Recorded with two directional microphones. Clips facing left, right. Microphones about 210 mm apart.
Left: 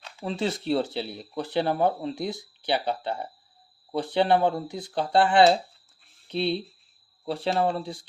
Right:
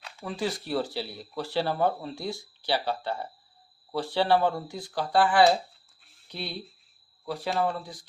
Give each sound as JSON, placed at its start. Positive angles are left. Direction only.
{"t": 0.2, "sound": "speech", "side_deg": 25}